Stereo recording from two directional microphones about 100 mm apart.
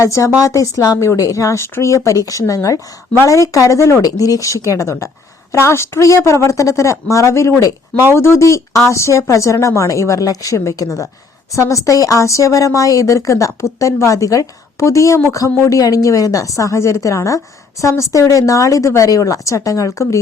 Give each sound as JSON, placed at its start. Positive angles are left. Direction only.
{"t": 0.0, "sound": "a woman's voice", "side_deg": 30}